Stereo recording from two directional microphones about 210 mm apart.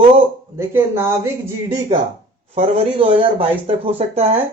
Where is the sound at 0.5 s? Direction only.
10° right (ahead or behind).